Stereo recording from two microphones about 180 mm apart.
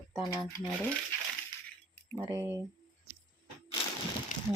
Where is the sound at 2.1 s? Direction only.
15° right (ahead or behind).